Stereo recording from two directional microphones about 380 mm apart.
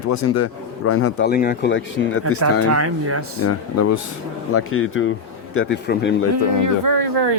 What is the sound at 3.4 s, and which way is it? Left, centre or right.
A man's voice, left.